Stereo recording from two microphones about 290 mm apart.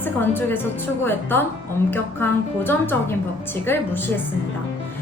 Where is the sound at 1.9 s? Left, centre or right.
Centre.